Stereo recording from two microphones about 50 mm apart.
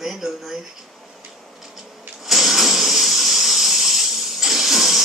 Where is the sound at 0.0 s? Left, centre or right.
Centre.